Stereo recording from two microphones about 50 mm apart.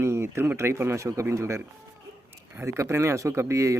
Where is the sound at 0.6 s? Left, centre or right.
Right.